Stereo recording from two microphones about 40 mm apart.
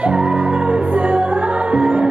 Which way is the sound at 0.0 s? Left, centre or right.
Right.